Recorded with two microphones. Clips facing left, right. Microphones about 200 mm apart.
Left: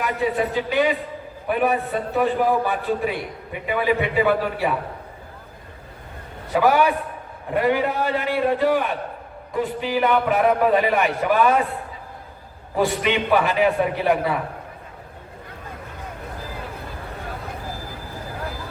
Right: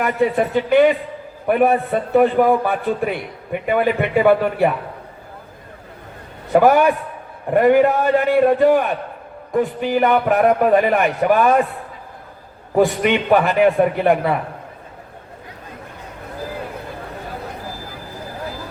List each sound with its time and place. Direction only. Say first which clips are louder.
0.0 s a man's voice: right 5 dB; 55° right (ahead or behind)
6.5 s a man's voice: right 5 dB; 50° right (ahead or behind)
12.7 s a man's voice: right 5 dB; 50° right (ahead or behind)